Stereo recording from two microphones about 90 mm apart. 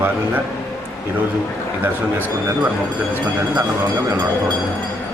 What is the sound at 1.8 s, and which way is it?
Speech, 20° right (ahead or behind).